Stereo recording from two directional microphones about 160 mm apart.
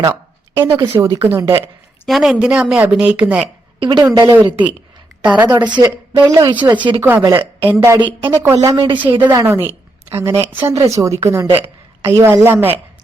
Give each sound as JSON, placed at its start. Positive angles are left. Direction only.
{"t": 0.0, "sound": "a sound", "side_deg": -15}
{"t": 0.7, "sound": "speech", "side_deg": -30}
{"t": 1.0, "sound": "speech", "side_deg": -15}
{"t": 2.0, "sound": "speech", "side_deg": 0}
{"t": 3.8, "sound": "a woman's voice", "side_deg": -30}
{"t": 5.4, "sound": "a woman's voice", "side_deg": -10}
{"t": 7.0, "sound": "speech", "side_deg": -15}
{"t": 7.9, "sound": "a woman's voice", "side_deg": -30}